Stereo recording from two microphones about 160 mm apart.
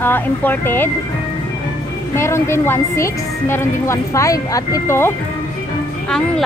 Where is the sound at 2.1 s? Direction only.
15° left (ahead or behind).